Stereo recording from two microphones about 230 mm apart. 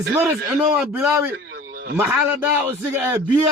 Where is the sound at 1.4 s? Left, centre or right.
Right.